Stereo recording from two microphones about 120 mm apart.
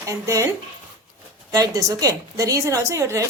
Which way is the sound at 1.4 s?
30° right (ahead or behind).